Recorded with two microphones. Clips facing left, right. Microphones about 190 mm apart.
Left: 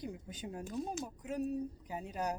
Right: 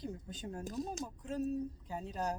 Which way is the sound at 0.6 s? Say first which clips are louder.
Left 1 dB; 40° right (ahead or behind).